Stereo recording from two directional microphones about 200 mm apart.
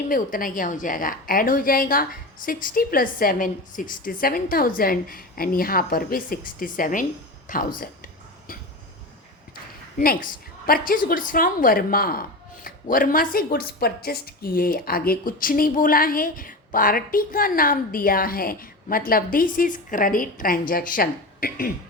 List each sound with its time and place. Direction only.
0.1 s speech: 45° left (ahead or behind)
7.8 s a sound: 45° left (ahead or behind)
10.0 s speech: 45° left (ahead or behind)